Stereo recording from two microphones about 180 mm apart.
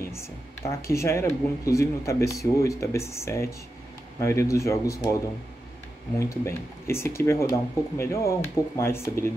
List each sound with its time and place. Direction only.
0.0 s speech: 15° left (ahead or behind)
6.1 s speech: 15° left (ahead or behind)